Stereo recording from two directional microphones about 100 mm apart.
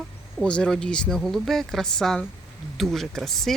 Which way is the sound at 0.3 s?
10° left (ahead or behind).